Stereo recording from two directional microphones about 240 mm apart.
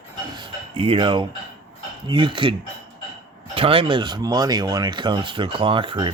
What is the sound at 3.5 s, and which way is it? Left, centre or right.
Speech, right.